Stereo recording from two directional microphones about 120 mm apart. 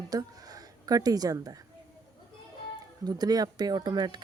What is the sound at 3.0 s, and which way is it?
Speech, 35° right (ahead or behind).